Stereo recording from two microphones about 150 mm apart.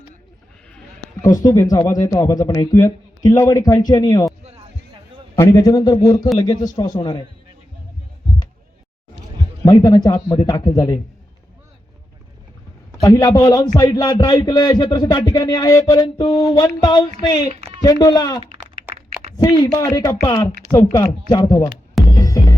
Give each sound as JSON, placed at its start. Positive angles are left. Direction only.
{"t": 1.2, "sound": "a man's voice", "side_deg": 25}
{"t": 5.4, "sound": "a man's voice", "side_deg": 25}
{"t": 9.7, "sound": "a man's voice", "side_deg": 30}
{"t": 13.0, "sound": "a man's voice", "side_deg": 25}
{"t": 22.1, "sound": "music", "side_deg": 25}